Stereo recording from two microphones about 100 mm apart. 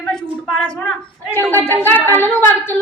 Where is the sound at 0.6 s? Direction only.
10° left (ahead or behind).